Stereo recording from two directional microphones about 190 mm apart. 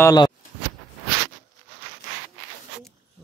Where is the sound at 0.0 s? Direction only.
20° left (ahead or behind).